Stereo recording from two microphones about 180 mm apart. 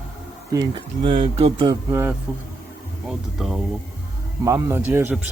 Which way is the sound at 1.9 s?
15° right (ahead or behind).